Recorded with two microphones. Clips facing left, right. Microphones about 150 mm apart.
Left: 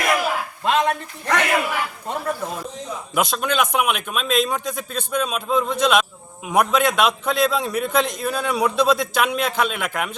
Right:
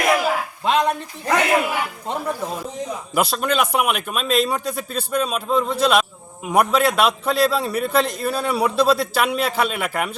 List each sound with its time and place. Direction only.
0.6 s a man's voice: 15° right (ahead or behind)
3.2 s a man's voice: 5° right (ahead or behind)